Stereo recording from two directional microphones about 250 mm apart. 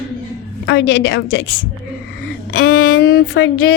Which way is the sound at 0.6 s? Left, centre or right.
Left.